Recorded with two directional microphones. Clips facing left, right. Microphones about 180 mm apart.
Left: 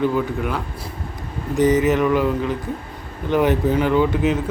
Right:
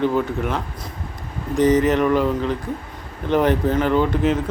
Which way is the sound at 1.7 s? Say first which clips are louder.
Even; 5° left (ahead or behind).